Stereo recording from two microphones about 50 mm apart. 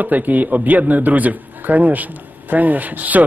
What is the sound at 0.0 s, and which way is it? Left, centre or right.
A man's voice, right.